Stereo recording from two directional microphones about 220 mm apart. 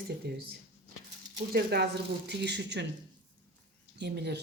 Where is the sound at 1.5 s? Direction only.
45° right (ahead or behind).